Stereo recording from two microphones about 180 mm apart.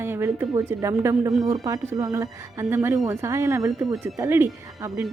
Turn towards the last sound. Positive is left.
turn(degrees=-15)  # may be behind; listen again after turning